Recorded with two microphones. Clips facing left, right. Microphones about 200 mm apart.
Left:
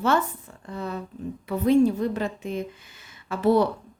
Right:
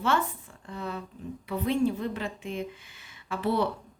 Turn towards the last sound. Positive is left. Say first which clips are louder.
# left 7 dB
turn(degrees=40)  # may be behind; listen again after turning